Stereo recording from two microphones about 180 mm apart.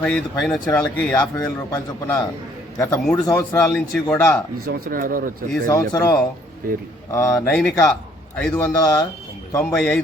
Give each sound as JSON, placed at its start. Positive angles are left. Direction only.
{"t": 0.0, "sound": "a man's voice", "side_deg": 5}
{"t": 4.6, "sound": "speech", "side_deg": -50}
{"t": 5.6, "sound": "a man's voice", "side_deg": 15}